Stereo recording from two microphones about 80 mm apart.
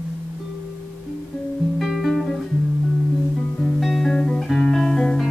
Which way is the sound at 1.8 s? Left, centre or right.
Centre.